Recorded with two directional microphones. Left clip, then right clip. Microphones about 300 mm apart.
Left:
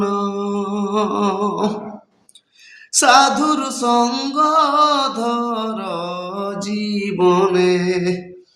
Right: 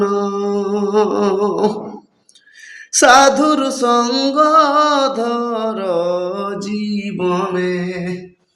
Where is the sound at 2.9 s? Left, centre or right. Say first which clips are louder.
Right 3 dB; left.